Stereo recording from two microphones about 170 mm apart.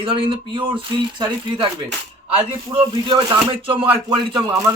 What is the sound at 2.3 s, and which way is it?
Speech, 35° right (ahead or behind).